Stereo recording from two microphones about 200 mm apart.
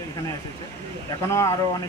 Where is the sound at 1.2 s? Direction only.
15° left (ahead or behind).